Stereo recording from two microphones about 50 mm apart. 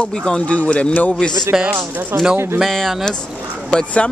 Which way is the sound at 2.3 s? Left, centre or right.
Right.